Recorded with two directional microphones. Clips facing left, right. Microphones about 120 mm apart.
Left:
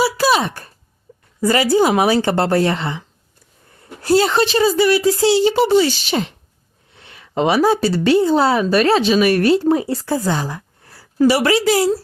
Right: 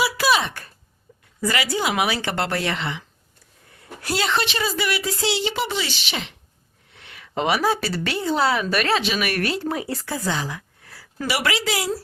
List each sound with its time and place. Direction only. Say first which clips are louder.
0.0 s a sound: left 5 dB; 35° left (ahead or behind)
1.4 s speech: left 9 dB; 35° left (ahead or behind)
4.0 s speech: left 9 dB; 35° left (ahead or behind)